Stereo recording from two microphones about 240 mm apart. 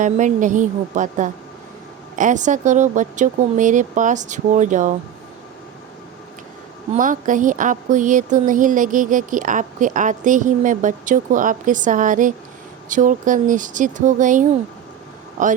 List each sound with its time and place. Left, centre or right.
0.0 s speech: right
6.9 s speech: right